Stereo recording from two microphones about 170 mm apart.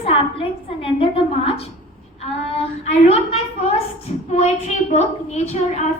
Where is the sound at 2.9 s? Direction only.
40° left (ahead or behind).